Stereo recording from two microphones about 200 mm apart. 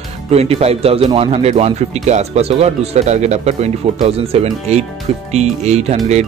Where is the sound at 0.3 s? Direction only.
30° right (ahead or behind).